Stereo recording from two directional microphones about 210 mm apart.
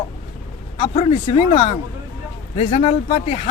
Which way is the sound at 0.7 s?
30° left (ahead or behind).